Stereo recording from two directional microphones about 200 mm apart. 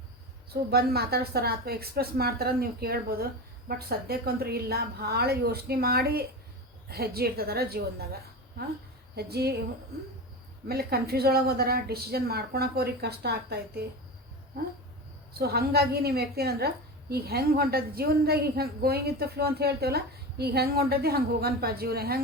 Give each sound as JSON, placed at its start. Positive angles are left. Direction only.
{"t": 0.5, "sound": "a woman's voice", "side_deg": -50}
{"t": 9.1, "sound": "a woman's voice", "side_deg": -50}
{"t": 10.7, "sound": "a woman's voice", "side_deg": -50}
{"t": 15.3, "sound": "a woman's voice", "side_deg": -50}